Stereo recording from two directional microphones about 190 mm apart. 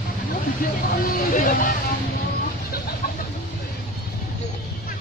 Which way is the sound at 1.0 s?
50° left (ahead or behind).